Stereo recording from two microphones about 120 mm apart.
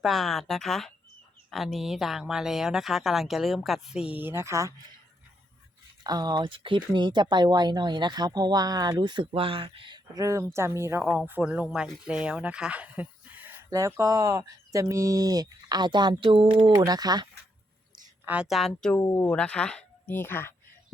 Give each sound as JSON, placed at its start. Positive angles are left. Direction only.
{"t": 0.0, "sound": "speech", "side_deg": 0}
{"t": 4.2, "sound": "speech", "side_deg": -20}
{"t": 6.0, "sound": "speech", "side_deg": -35}
{"t": 10.5, "sound": "speech", "side_deg": -25}
{"t": 13.7, "sound": "speech", "side_deg": -25}
{"t": 18.4, "sound": "speech", "side_deg": 0}
{"t": 18.9, "sound": "speech", "side_deg": 25}
{"t": 19.3, "sound": "speech", "side_deg": 10}